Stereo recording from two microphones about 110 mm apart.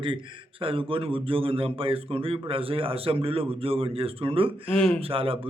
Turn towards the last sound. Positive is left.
turn(degrees=-55)  # may be behind; listen again after turning